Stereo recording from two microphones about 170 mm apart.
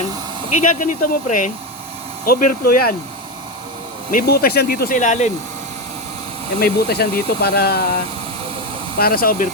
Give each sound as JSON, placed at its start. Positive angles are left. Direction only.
{"t": 0.5, "sound": "speech", "side_deg": 50}
{"t": 2.2, "sound": "speech", "side_deg": 60}
{"t": 4.1, "sound": "speech", "side_deg": 55}
{"t": 6.6, "sound": "speech", "side_deg": 65}
{"t": 9.0, "sound": "speech", "side_deg": 65}